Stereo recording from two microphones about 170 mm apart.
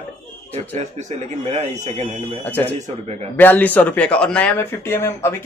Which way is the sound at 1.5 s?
45° right (ahead or behind).